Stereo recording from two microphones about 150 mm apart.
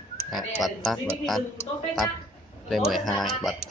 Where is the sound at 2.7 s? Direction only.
Centre (ahead or behind).